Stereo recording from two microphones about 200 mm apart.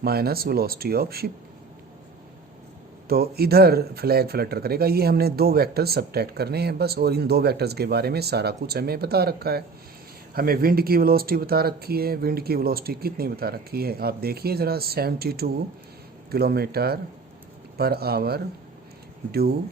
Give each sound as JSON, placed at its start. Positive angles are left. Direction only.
{"t": 0.0, "sound": "speech", "side_deg": -50}
{"t": 3.1, "sound": "speech", "side_deg": -50}